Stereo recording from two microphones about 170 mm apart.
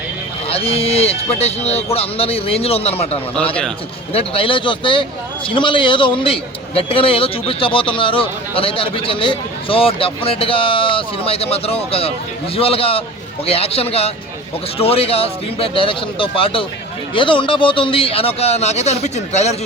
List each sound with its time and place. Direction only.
0.4 s a man's voice: 35° left (ahead or behind)